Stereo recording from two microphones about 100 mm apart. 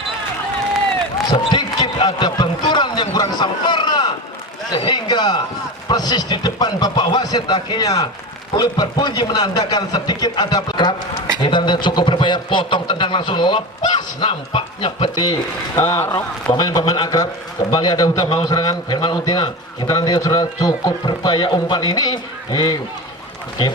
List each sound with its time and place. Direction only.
1.3 s basketball bounce: 45° left (ahead or behind)
4.7 s a sound: 55° left (ahead or behind)
5.9 s a man's voice: 45° left (ahead or behind)
14.3 s speech: 65° left (ahead or behind)
15.7 s a man's voice: 30° left (ahead or behind)
16.1 s a man's voice: 50° left (ahead or behind)